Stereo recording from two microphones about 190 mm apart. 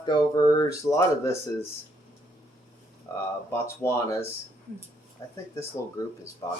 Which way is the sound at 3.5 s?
15° left (ahead or behind).